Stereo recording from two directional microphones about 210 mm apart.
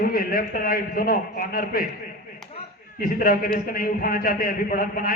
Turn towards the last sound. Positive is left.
turn(degrees=45)  # may be behind; listen again after turning